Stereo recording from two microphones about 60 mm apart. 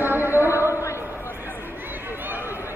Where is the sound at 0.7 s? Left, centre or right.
Left.